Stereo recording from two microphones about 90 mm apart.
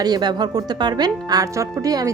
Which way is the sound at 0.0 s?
50° right (ahead or behind).